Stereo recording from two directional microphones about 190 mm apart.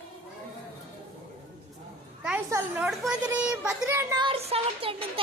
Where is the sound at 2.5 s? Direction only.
15° right (ahead or behind).